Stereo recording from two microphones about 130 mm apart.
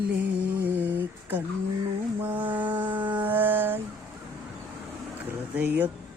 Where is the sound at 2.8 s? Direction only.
15° right (ahead or behind).